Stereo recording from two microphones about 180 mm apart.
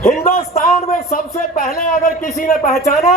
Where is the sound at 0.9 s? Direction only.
55° left (ahead or behind).